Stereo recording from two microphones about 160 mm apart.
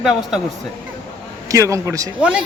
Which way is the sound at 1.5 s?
20° right (ahead or behind).